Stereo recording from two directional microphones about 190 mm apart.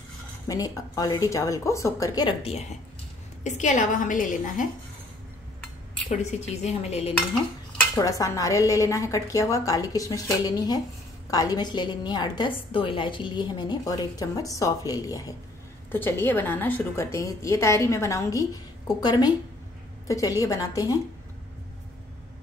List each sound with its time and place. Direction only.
0.5 s a woman's voice: 20° left (ahead or behind)
3.4 s a woman's voice: 40° left (ahead or behind)
6.0 s speech: 35° left (ahead or behind)
7.7 s a woman's voice: 15° left (ahead or behind)